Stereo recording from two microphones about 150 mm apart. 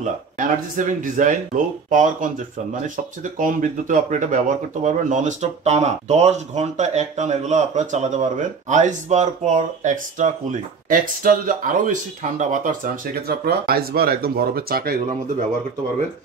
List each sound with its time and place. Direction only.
0.0 s speech: 55° right (ahead or behind)
3.3 s speech: 60° right (ahead or behind); by 15.0 s 85° right